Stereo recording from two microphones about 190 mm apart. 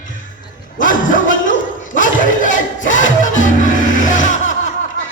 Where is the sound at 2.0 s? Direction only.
45° left (ahead or behind).